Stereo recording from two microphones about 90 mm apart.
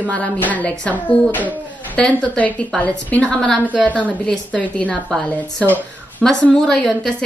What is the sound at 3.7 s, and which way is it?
Speech, 15° right (ahead or behind).